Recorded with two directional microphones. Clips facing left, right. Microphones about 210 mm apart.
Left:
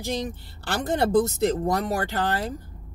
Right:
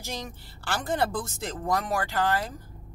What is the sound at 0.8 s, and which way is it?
Speech, 40° left (ahead or behind).